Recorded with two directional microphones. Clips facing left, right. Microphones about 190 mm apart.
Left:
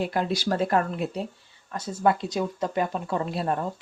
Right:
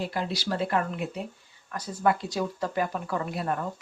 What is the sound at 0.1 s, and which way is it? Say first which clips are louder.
Speech: left 4 dB; 50° left (ahead or behind).